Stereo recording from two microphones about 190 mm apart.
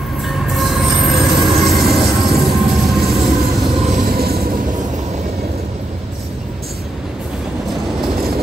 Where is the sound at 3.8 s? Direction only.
35° right (ahead or behind).